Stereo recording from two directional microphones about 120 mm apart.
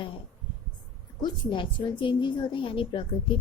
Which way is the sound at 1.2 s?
40° left (ahead or behind).